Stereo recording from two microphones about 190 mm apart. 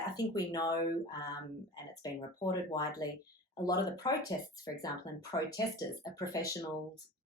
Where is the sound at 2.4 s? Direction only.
20° left (ahead or behind).